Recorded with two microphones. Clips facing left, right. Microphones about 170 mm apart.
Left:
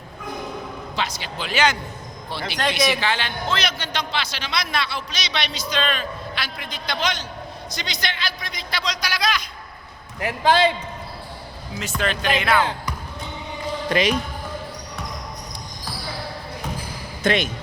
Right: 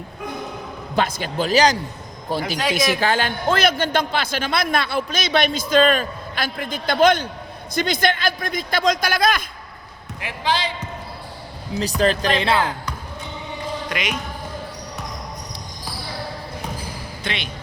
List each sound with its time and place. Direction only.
0.9 s a man's voice: 50° right (ahead or behind)
10.2 s speech: 45° left (ahead or behind)
11.7 s a man's voice: 35° right (ahead or behind)
13.9 s speech: 35° left (ahead or behind)
17.2 s speech: 45° left (ahead or behind)